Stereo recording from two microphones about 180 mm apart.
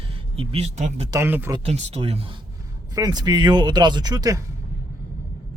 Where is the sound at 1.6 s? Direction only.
35° right (ahead or behind).